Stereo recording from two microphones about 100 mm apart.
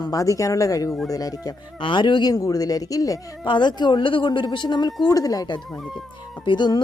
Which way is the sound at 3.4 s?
50° left (ahead or behind).